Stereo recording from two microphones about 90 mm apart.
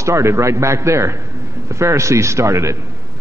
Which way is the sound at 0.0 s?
35° right (ahead or behind).